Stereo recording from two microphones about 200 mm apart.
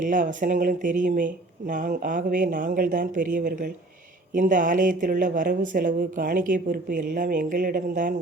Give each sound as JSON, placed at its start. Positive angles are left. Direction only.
{"t": 0.0, "sound": "speech", "side_deg": -40}